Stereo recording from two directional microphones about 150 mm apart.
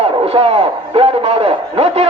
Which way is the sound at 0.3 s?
40° right (ahead or behind).